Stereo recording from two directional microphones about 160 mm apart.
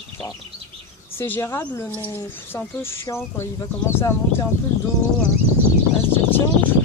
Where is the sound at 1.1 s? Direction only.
15° left (ahead or behind).